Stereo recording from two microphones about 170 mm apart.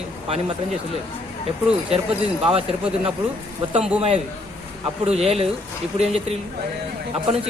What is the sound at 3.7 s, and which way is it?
Speech, 5° right (ahead or behind).